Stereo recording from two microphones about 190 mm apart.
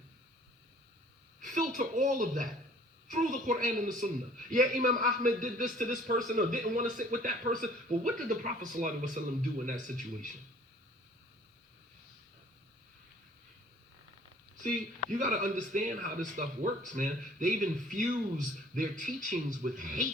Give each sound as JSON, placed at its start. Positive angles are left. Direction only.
{"t": 1.4, "sound": "a woman's voice", "side_deg": -40}
{"t": 15.1, "sound": "speech", "side_deg": -40}